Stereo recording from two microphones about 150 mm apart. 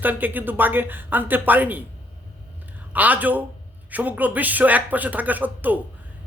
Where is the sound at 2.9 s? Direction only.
10° right (ahead or behind).